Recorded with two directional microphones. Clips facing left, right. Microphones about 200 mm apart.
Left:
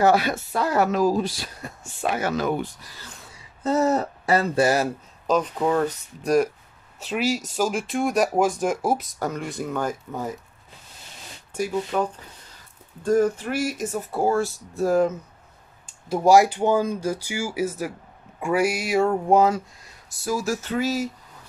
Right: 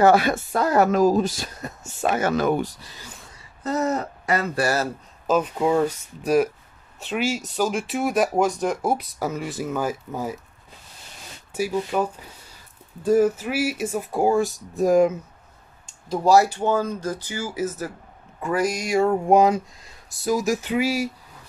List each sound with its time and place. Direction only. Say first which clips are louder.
0.0 s speech: right 3 dB; 50° right (ahead or behind)
3.6 s speech: left 3 dB; 30° left (ahead or behind)
5.2 s speech: right 1 dB; 5° right (ahead or behind)
11.5 s speech: right 1 dB; 5° right (ahead or behind)
16.1 s speech: left 1 dB; 15° left (ahead or behind)
19.2 s speech: right 2 dB; 15° right (ahead or behind)